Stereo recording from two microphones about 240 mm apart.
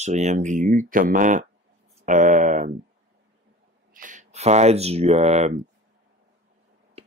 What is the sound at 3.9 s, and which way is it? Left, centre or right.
Speech, right.